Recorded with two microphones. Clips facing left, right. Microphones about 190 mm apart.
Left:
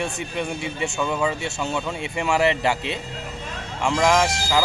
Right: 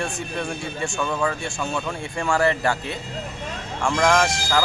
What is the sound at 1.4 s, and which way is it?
Speech, 20° left (ahead or behind).